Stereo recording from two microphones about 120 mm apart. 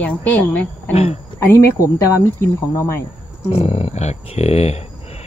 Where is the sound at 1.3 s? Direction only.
25° left (ahead or behind).